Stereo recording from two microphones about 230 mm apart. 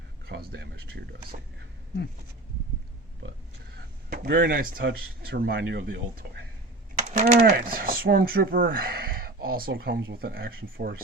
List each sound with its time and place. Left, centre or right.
0.3 s speech: right
4.1 s speech: right